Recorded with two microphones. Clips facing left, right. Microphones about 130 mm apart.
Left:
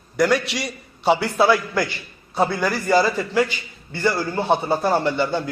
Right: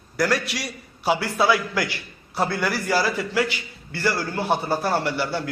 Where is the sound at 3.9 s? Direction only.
15° left (ahead or behind).